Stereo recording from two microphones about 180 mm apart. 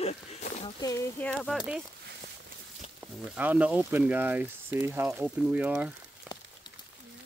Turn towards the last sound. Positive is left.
turn(degrees=-10)  # may be behind; listen again after turning